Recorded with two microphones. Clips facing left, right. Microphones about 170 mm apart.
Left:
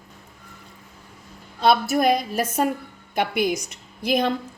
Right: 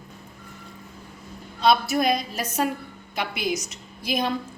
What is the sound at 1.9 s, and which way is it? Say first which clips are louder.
A woman's voice: left 3 dB; 55° left (ahead or behind).